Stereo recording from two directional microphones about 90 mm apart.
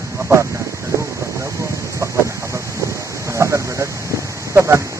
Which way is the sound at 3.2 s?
35° right (ahead or behind).